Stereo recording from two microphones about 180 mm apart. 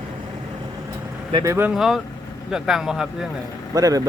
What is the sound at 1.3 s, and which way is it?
Speech, 25° right (ahead or behind).